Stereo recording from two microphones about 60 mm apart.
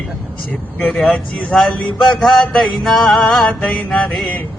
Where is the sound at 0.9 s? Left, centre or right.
Centre.